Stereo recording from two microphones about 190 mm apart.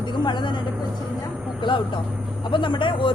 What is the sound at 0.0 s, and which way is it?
Speech, 25° left (ahead or behind).